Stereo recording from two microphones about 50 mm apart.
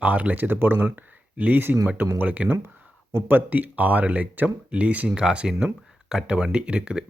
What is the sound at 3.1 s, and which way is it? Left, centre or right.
Speech, right.